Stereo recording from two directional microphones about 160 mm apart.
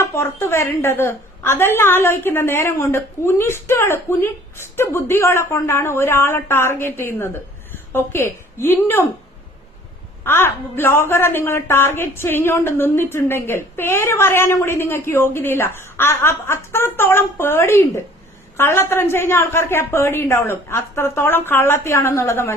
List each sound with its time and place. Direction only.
0.0 s a woman's voice: 15° left (ahead or behind)
10.2 s a woman's voice: 15° left (ahead or behind)